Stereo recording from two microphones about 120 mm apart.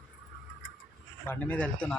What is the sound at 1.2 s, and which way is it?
Speech, 15° left (ahead or behind).